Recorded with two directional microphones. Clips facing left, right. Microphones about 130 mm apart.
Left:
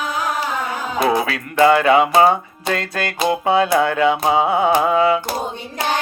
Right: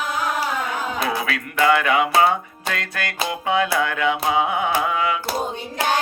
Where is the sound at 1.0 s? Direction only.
30° left (ahead or behind).